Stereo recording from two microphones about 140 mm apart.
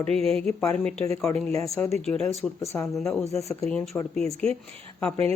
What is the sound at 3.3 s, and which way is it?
Speech, 20° left (ahead or behind).